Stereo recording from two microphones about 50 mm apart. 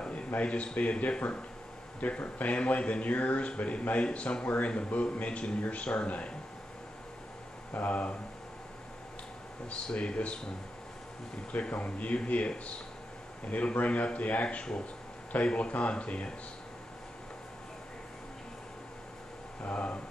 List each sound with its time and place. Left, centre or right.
0.3 s speech: left
7.7 s speech: left
9.7 s speech: left
11.7 s speech: left
13.7 s speech: left
19.6 s speech: left